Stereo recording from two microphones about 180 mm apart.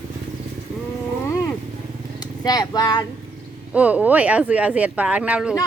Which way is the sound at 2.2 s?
20° left (ahead or behind).